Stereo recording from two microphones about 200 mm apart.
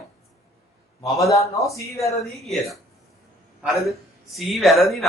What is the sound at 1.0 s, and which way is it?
Speech, 15° left (ahead or behind).